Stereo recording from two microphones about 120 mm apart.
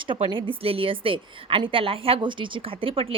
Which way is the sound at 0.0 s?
45° right (ahead or behind).